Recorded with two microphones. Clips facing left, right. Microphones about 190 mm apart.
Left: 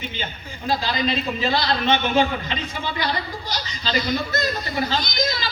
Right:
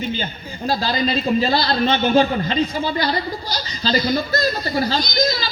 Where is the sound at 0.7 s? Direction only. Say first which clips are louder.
Right 2 dB; 35° right (ahead or behind).